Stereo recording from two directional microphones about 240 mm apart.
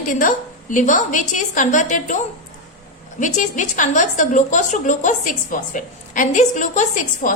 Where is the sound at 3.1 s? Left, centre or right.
Left.